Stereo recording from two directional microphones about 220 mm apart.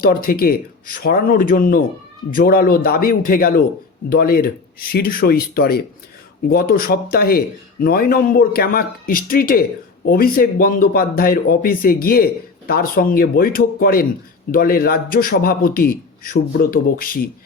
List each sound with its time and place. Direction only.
0.0 s a man's voice: 40° left (ahead or behind)